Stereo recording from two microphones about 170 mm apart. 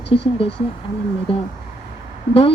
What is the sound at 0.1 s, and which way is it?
Speech, 35° left (ahead or behind).